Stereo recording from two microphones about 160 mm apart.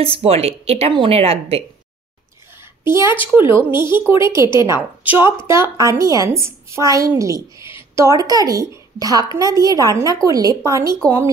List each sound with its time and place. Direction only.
0.0 s a woman's voice: 35° right (ahead or behind)
2.8 s a woman's voice: 15° right (ahead or behind)